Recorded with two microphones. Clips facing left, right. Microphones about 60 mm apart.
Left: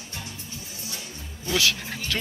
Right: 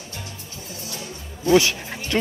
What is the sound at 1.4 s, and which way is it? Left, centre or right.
Music, right.